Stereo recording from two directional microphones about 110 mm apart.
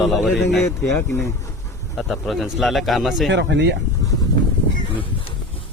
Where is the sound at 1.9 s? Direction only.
Centre (ahead or behind).